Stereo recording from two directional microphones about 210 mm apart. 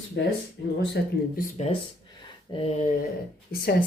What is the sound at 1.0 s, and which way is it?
Speech, 50° left (ahead or behind).